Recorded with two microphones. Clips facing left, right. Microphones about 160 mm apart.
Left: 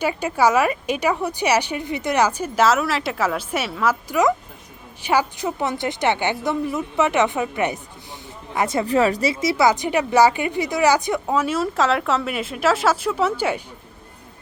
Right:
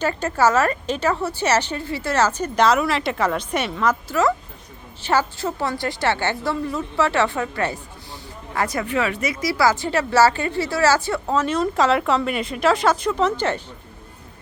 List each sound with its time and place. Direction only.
0.0 s speech: 10° left (ahead or behind)
4.1 s a woman's voice: 15° left (ahead or behind)